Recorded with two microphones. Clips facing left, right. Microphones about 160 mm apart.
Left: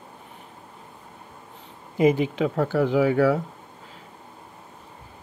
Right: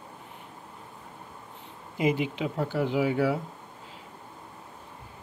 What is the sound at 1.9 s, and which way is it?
Speech, 45° left (ahead or behind).